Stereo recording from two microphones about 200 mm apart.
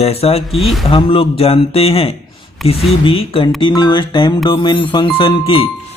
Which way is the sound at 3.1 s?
25° left (ahead or behind).